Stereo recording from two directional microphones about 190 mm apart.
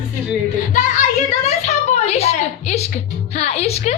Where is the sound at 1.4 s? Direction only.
35° left (ahead or behind).